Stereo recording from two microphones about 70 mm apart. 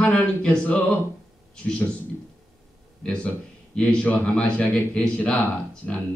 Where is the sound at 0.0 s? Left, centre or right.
Centre.